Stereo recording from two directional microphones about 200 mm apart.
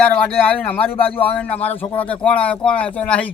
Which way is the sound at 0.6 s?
10° left (ahead or behind).